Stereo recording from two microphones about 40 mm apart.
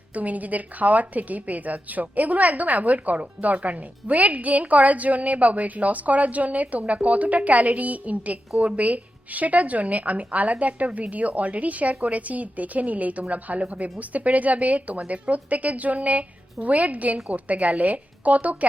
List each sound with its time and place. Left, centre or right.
0.1 s a woman's voice: right